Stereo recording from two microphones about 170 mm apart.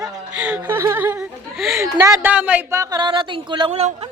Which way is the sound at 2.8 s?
25° right (ahead or behind).